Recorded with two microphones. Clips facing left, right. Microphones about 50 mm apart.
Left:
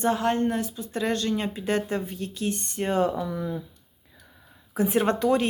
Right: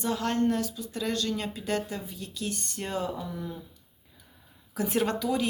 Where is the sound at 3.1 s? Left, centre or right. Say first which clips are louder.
Left 7 dB; left.